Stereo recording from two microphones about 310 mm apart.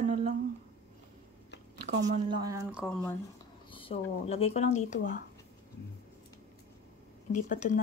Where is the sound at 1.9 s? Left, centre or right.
Right; by 3.0 s centre.